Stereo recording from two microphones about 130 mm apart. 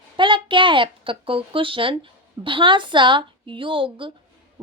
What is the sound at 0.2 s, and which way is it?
A child's voice, 40° right (ahead or behind).